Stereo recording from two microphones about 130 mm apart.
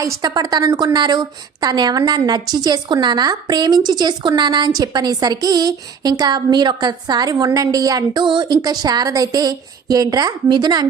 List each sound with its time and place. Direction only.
0.0 s a woman's voice: 25° right (ahead or behind)